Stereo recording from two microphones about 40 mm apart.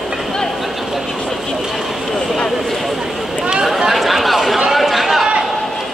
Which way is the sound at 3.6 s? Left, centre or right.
Centre.